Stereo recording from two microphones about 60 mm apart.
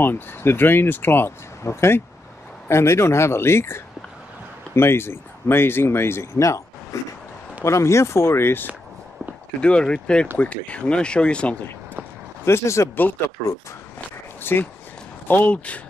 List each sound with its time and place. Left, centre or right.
0.0 s speech: left
1.6 s speech: left
6.4 s a sound: left
7.6 s speech: left
9.6 s speech: centre
12.4 s speech: left
14.4 s speech: left